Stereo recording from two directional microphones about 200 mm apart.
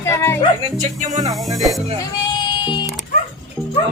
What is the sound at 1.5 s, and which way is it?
Speech, centre (ahead or behind).